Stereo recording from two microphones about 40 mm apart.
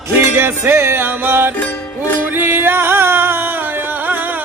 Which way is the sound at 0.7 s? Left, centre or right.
Right.